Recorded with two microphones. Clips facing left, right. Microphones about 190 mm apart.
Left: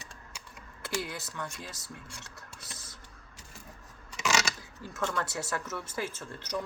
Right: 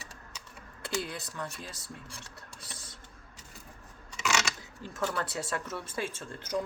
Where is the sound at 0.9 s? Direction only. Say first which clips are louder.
Even; 30° right (ahead or behind).